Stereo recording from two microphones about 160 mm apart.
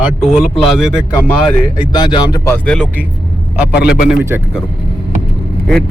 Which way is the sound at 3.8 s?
80° left.